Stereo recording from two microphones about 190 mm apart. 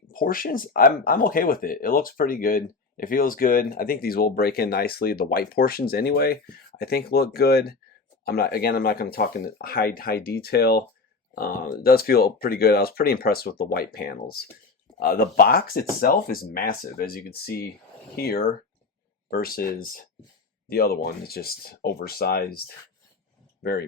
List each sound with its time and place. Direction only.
0.1 s speech: 50° left (ahead or behind)